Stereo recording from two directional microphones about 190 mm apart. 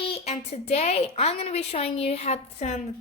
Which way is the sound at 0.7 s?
35° left (ahead or behind).